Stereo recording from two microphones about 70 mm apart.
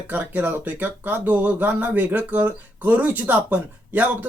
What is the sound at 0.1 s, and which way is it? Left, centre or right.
Speech, right.